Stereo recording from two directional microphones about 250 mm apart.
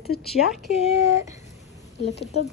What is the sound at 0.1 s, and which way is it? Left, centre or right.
Speech, left.